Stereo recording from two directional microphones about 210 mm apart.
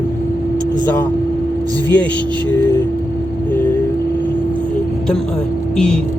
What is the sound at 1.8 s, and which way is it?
Speech, 5° left (ahead or behind).